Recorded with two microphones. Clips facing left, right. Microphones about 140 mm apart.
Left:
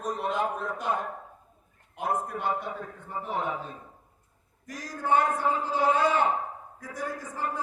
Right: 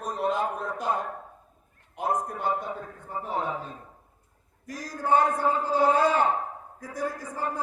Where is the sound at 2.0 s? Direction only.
40° right (ahead or behind).